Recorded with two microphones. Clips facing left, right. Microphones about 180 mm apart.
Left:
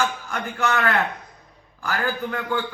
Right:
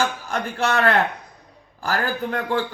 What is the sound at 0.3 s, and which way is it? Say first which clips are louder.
Speech: right 2 dB; 35° right (ahead or behind).